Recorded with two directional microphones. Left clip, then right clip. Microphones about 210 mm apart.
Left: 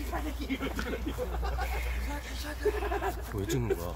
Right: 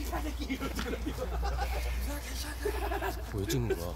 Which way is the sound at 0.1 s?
45° right (ahead or behind).